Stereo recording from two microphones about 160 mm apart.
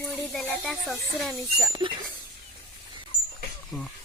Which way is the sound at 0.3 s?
Centre (ahead or behind).